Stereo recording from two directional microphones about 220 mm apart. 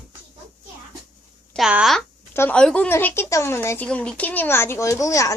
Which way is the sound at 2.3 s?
10° left (ahead or behind).